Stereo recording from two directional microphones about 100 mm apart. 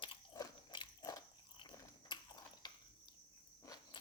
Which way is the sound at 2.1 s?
45° left (ahead or behind).